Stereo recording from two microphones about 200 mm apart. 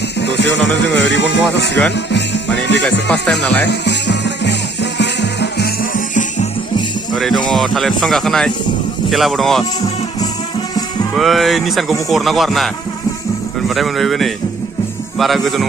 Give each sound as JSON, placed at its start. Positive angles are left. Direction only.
{"t": 0.2, "sound": "speech", "side_deg": 60}
{"t": 3.4, "sound": "speech", "side_deg": 10}
{"t": 3.7, "sound": "music", "side_deg": 60}
{"t": 7.1, "sound": "speech", "side_deg": 0}
{"t": 11.1, "sound": "speech", "side_deg": 0}